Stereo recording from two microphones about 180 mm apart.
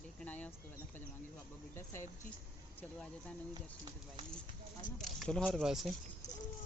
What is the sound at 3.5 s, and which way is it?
Speech, 25° right (ahead or behind).